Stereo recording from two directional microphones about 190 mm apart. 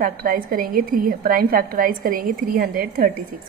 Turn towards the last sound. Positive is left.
turn(degrees=-50)  # may be behind; listen again after turning